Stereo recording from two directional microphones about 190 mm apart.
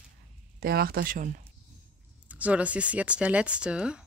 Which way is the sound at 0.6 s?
50° right (ahead or behind).